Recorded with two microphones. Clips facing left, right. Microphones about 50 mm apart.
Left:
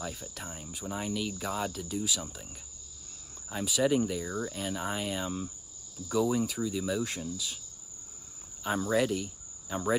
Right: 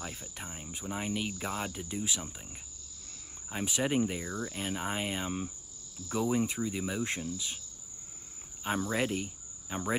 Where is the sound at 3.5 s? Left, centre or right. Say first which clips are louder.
Left 4 dB; right.